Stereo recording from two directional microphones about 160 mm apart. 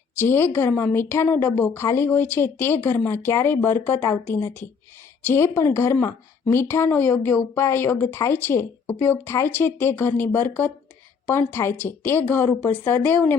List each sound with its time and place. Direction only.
0.2 s a woman's voice: 15° left (ahead or behind)